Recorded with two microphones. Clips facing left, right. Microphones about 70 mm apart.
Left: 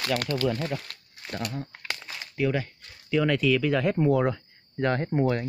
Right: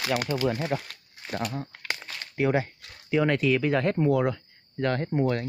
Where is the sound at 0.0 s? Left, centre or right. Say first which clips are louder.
Even; centre.